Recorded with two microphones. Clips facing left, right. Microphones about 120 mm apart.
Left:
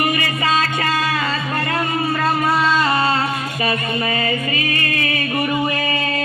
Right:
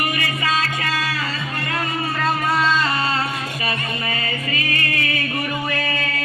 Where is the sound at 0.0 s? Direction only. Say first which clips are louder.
Left 4 dB; 30° left (ahead or behind).